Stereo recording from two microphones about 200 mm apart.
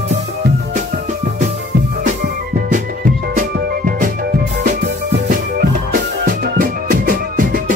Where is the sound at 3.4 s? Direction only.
45° right (ahead or behind).